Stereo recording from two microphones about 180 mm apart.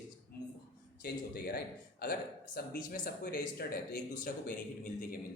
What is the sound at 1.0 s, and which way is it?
A man's voice, 60° left (ahead or behind).